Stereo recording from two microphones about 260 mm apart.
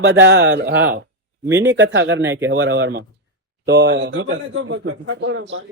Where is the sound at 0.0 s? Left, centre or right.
Right.